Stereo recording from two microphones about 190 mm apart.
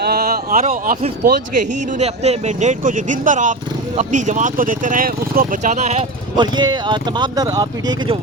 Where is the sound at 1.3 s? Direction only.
40° right (ahead or behind).